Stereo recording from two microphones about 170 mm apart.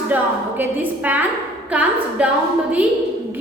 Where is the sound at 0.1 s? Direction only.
10° right (ahead or behind).